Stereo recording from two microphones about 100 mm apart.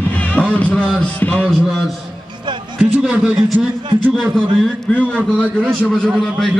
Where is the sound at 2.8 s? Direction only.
10° right (ahead or behind).